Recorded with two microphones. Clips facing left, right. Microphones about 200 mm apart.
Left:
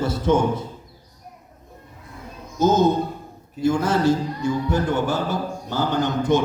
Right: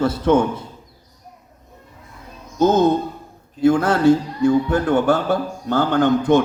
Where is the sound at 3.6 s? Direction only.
60° right (ahead or behind).